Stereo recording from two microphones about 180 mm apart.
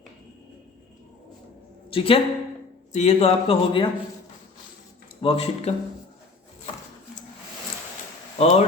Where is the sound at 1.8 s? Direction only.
30° left (ahead or behind).